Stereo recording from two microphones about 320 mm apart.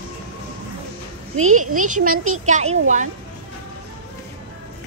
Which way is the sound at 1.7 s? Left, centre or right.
Right.